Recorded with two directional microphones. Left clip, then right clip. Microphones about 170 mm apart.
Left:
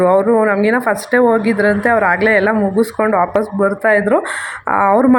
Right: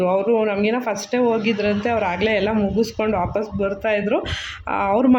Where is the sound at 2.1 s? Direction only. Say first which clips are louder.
Left 7 dB; 60° left (ahead or behind).